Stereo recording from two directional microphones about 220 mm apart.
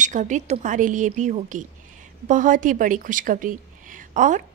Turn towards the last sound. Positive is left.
turn(degrees=-35)  # may be behind; listen again after turning